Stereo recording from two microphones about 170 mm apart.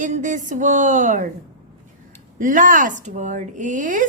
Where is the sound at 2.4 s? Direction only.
50° right (ahead or behind).